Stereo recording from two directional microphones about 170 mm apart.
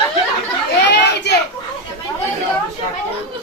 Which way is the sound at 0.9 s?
80° left.